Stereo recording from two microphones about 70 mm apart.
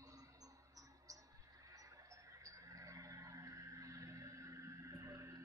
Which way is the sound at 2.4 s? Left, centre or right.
Right.